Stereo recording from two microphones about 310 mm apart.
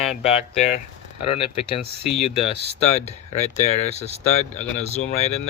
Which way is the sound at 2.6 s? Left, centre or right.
Left.